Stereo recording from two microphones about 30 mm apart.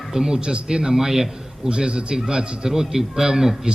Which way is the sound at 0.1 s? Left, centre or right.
Centre.